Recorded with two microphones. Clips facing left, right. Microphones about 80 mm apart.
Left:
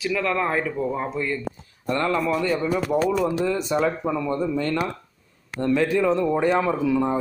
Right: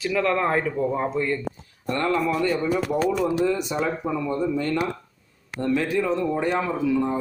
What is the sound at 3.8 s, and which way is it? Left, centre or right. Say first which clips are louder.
Speech: left 2 dB; centre.